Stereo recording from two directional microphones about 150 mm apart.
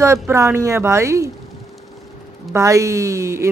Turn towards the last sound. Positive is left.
turn(degrees=-20)  # may be behind; listen again after turning